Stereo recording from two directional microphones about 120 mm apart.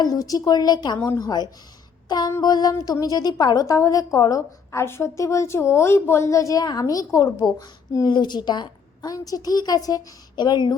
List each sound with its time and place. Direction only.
0.0 s a woman's voice: 30° left (ahead or behind)
2.0 s a sound: 35° left (ahead or behind)
2.4 s a woman's voice: 35° left (ahead or behind)